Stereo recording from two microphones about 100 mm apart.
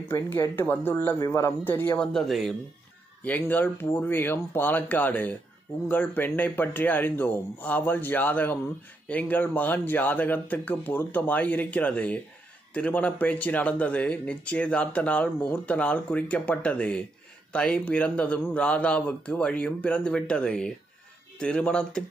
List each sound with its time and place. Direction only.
0.1 s speech: 20° left (ahead or behind)
2.1 s speech: centre (ahead or behind)
3.3 s speech: 15° left (ahead or behind)